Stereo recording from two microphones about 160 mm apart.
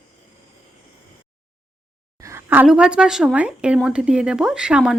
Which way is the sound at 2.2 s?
15° right (ahead or behind).